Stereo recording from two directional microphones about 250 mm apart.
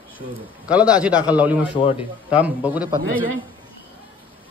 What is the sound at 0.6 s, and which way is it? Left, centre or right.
A man's voice, centre.